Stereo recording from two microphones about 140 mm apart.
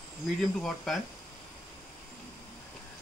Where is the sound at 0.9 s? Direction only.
Centre (ahead or behind).